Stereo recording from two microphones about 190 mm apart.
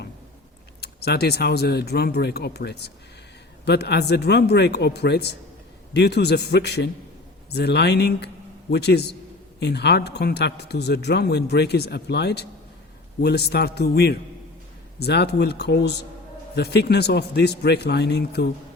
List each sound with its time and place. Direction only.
0.8 s a man's voice: 60° left (ahead or behind)